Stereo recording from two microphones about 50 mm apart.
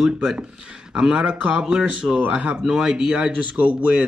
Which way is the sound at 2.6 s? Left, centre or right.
Centre.